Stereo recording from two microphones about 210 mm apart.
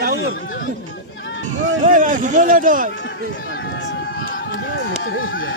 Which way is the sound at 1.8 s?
35° right (ahead or behind).